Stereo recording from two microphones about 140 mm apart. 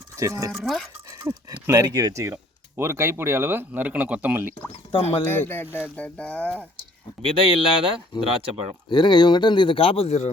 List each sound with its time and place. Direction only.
0.2 s speech: 20° right (ahead or behind)
0.5 s speech: centre (ahead or behind)
1.2 s speech: 30° right (ahead or behind); by 4.4 s 10° right (ahead or behind)
4.9 s speech: 40° left (ahead or behind)
5.2 s speech: 15° left (ahead or behind)
5.6 s speech: 10° right (ahead or behind)
6.0 s speech: 10° left (ahead or behind)
7.2 s speech: 40° right (ahead or behind)
8.9 s speech: 30° left (ahead or behind); by 10.3 s 50° left (ahead or behind)